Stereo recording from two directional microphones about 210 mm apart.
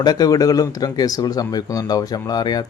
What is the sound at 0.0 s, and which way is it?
Speech, 20° left (ahead or behind).